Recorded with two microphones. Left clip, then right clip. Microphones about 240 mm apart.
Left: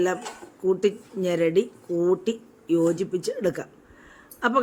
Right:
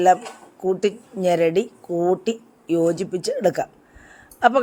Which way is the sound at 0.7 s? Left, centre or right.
Centre.